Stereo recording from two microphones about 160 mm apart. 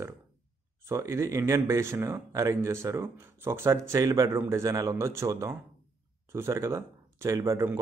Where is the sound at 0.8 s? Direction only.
15° right (ahead or behind).